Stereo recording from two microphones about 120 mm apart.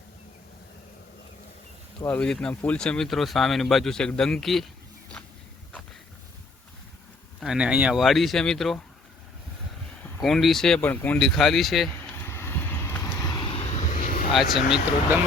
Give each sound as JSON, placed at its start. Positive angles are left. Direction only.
{"t": 2.0, "sound": "speech", "side_deg": 10}
{"t": 7.3, "sound": "speech", "side_deg": -5}
{"t": 10.2, "sound": "speech", "side_deg": 0}
{"t": 11.2, "sound": "speech", "side_deg": 0}
{"t": 11.9, "sound": "vehicle", "side_deg": 20}
{"t": 13.5, "sound": "vehicle", "side_deg": 60}
{"t": 14.3, "sound": "speech", "side_deg": 0}